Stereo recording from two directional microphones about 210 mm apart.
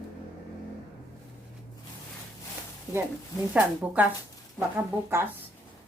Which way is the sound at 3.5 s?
5° right (ahead or behind).